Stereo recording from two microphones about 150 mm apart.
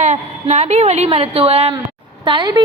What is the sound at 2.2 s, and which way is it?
Speech, 30° right (ahead or behind).